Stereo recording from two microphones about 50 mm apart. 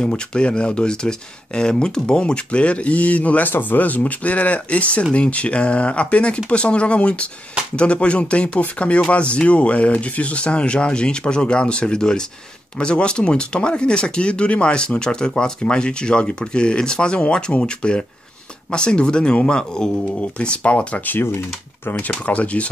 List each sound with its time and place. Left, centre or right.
0.0 s speech: centre
21.1 s speech: left